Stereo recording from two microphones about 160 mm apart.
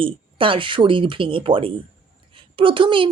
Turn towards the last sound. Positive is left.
turn(degrees=-30)  # may be behind; listen again after turning